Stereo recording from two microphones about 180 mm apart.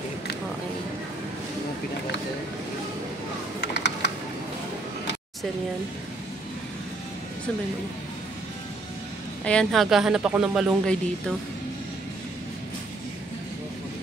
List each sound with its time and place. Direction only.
3.7 s typing: 75° left (ahead or behind)
9.4 s speech: 5° left (ahead or behind)